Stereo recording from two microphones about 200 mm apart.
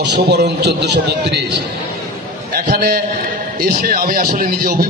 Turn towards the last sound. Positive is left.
turn(degrees=-45)  # may be behind; listen again after turning